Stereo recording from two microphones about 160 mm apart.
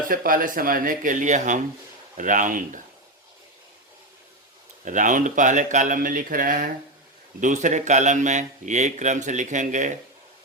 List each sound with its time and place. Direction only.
0.1 s speech: 60° right (ahead or behind)
4.9 s speech: 50° right (ahead or behind)